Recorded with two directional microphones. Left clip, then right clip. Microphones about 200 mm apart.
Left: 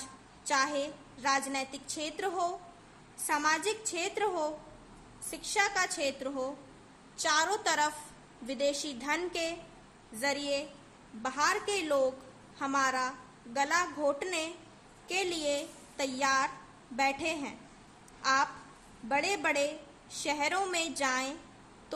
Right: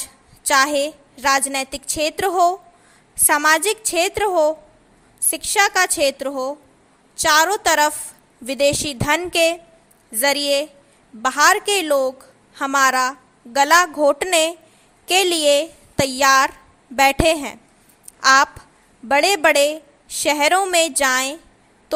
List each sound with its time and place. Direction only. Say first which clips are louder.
0.4 s a woman's voice: right 14 dB; 50° right (ahead or behind)
18.2 s babbling: right 15 dB; 50° right (ahead or behind)
19.0 s a woman's voice: right 15 dB; 50° right (ahead or behind)